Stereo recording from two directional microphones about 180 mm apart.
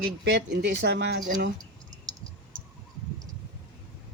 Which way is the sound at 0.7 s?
85° right.